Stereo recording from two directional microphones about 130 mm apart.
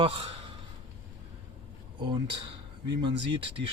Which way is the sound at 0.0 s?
40° right (ahead or behind).